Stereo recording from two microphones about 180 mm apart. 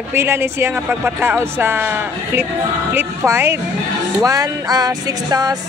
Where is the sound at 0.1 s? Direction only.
15° right (ahead or behind).